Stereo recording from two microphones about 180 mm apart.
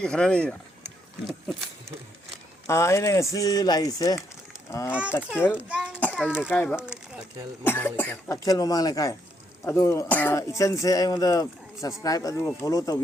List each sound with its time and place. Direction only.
0.0 s speech: 5° left (ahead or behind)
2.6 s speech: 15° left (ahead or behind)
4.9 s a child's voice: 5° right (ahead or behind)
6.0 s a sound: 10° left (ahead or behind)
6.5 s speech: 10° left (ahead or behind)
6.7 s speech: 5° right (ahead or behind)
7.6 s speech: 10° left (ahead or behind)